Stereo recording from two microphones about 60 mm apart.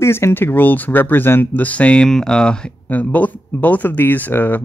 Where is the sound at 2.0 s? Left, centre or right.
Centre.